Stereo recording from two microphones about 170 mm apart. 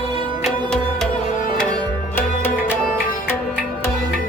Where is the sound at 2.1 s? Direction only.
10° left (ahead or behind).